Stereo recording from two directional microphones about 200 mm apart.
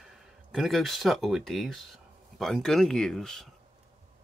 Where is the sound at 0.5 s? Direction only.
Centre (ahead or behind).